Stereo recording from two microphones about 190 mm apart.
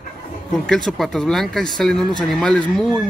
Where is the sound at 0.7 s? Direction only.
5° left (ahead or behind).